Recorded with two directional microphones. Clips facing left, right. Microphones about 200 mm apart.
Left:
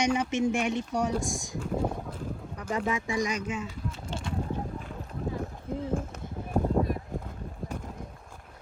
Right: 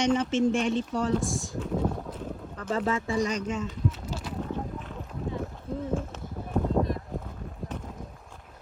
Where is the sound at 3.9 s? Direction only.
5° right (ahead or behind).